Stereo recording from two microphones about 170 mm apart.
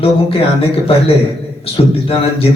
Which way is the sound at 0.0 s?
35° left (ahead or behind).